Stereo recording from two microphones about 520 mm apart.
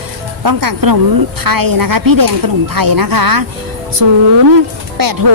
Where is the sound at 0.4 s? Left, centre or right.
Right.